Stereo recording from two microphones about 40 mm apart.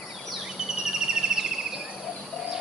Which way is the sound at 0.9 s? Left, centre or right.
Centre.